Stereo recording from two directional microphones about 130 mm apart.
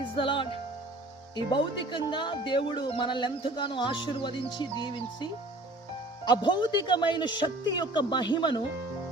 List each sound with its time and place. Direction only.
0.2 s speech: 40° left (ahead or behind)